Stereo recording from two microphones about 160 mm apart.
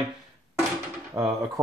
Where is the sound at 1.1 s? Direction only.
20° right (ahead or behind).